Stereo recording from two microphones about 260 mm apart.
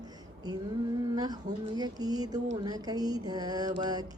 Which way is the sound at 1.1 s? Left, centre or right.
Centre.